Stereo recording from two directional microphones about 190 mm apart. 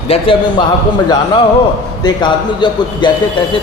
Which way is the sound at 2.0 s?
25° left (ahead or behind).